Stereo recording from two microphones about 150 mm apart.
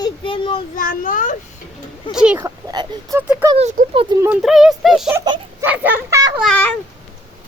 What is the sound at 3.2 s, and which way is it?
Speech, 10° right (ahead or behind).